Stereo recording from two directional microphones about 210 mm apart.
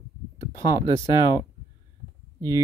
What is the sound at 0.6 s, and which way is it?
Speech, 15° right (ahead or behind).